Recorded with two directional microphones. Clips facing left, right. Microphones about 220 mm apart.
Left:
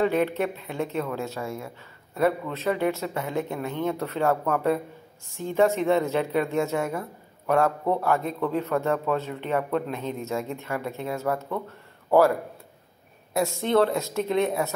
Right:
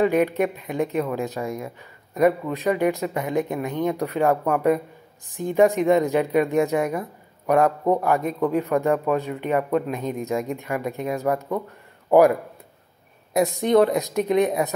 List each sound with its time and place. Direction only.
0.0 s speech: 15° right (ahead or behind)
13.3 s speech: 15° right (ahead or behind)